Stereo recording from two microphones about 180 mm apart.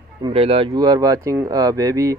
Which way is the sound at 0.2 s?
30° right (ahead or behind).